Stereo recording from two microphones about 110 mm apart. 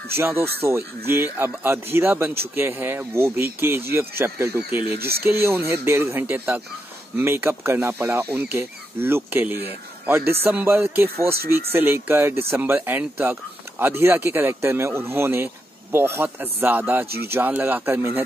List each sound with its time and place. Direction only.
0.2 s a man's voice: 20° right (ahead or behind)